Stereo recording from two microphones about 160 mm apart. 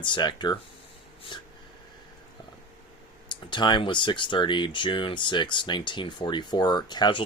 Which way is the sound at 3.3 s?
30° left (ahead or behind).